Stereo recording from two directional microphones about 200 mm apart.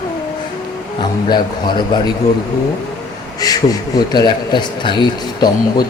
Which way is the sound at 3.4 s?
20° left (ahead or behind).